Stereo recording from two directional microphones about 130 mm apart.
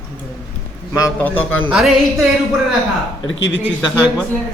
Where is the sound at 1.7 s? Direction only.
Centre (ahead or behind).